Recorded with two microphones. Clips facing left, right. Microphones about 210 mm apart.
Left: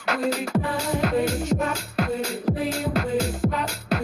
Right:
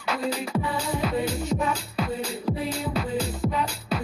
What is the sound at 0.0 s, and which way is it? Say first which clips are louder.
Music: left 3 dB; 75° left (ahead or behind).